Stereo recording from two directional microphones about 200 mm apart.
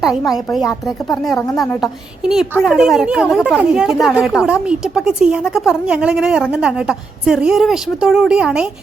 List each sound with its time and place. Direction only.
0.5 s a woman's voice: centre (ahead or behind)